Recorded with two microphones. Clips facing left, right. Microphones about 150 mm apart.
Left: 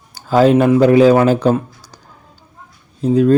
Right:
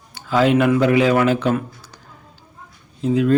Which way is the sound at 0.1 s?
40° left (ahead or behind).